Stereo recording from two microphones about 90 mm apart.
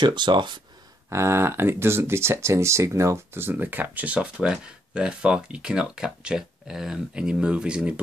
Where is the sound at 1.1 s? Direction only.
30° right (ahead or behind).